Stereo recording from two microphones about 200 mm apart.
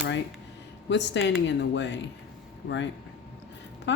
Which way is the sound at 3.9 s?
65° left (ahead or behind).